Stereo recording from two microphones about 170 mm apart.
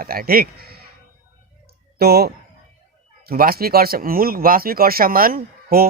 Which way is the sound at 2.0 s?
70° right (ahead or behind).